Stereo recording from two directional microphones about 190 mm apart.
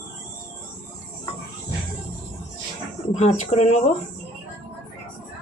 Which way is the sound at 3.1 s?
35° left (ahead or behind).